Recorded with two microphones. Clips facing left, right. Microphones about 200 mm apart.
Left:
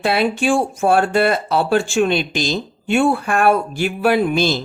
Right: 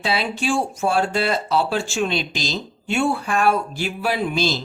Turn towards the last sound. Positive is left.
turn(degrees=55)  # may be behind; listen again after turning